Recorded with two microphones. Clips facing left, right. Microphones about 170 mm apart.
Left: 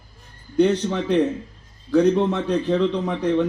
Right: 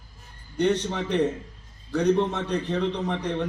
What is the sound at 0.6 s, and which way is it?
Speech, 65° right (ahead or behind).